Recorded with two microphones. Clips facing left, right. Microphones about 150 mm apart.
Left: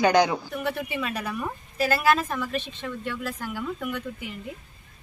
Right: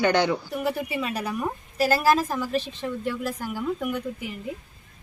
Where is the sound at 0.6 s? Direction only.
30° right (ahead or behind).